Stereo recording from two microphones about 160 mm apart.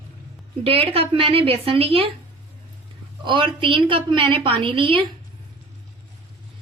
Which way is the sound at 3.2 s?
30° right (ahead or behind).